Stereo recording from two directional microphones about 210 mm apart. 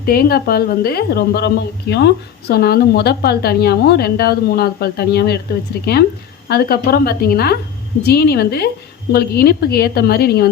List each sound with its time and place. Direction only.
0.0 s a woman's voice: 45° left (ahead or behind)